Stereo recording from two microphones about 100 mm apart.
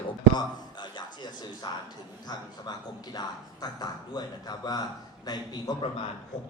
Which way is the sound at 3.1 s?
40° left (ahead or behind).